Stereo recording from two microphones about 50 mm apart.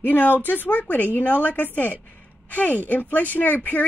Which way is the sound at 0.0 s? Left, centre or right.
Left.